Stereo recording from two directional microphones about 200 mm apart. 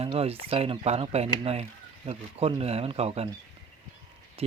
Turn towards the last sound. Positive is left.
turn(degrees=-30)  # may be behind; listen again after turning